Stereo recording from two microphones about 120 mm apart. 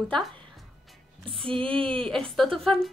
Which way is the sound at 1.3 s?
50° right (ahead or behind).